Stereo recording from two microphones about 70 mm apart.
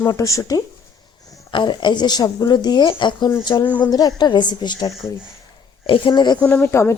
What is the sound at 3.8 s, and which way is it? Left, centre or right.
Speech, left.